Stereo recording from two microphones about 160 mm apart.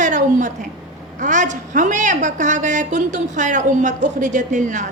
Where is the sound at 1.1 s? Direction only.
50° right (ahead or behind).